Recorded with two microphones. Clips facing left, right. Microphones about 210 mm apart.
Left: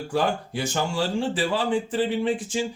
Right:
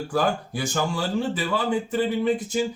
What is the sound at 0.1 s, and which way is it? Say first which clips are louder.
Speech: even; 25° left (ahead or behind).